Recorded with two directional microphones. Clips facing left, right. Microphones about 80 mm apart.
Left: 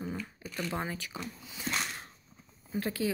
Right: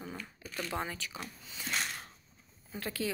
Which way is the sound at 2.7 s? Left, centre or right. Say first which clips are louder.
Left 4 dB; left.